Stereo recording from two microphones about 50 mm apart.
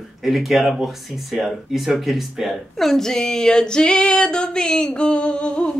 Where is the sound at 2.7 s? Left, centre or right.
Centre; by 5.7 s left.